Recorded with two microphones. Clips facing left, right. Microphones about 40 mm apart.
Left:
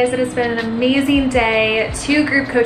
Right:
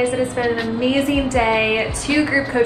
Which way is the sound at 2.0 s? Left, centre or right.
Left.